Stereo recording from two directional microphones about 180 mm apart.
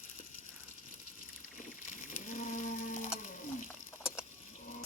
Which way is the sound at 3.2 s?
45° left (ahead or behind).